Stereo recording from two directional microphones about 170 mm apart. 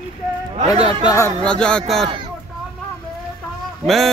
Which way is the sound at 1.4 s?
5° left (ahead or behind).